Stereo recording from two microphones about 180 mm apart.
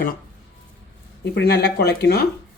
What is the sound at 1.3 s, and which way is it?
Speech, 60° left (ahead or behind).